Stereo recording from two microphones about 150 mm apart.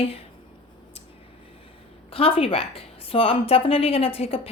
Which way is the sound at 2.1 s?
40° left (ahead or behind).